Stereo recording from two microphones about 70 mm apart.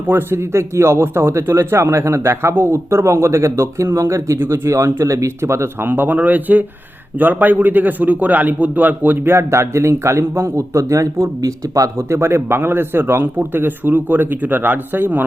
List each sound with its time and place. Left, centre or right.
0.1 s a man's voice: right
5.9 s a man's voice: right